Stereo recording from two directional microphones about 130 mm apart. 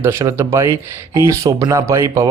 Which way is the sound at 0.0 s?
20° right (ahead or behind).